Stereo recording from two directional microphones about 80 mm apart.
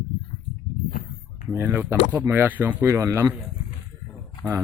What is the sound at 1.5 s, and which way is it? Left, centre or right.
Speech, right.